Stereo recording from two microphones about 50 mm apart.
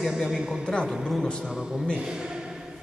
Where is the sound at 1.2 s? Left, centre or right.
Centre.